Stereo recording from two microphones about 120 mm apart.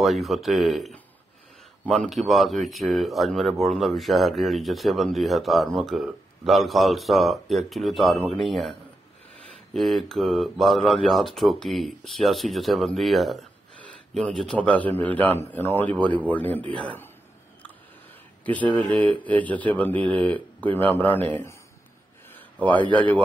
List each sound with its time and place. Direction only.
0.0 s speech: centre (ahead or behind)
9.8 s a man's voice: centre (ahead or behind)
18.4 s a man's voice: 15° left (ahead or behind)
22.3 s a sound: 10° left (ahead or behind)